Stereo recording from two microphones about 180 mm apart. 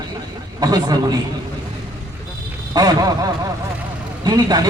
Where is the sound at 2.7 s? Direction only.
20° right (ahead or behind).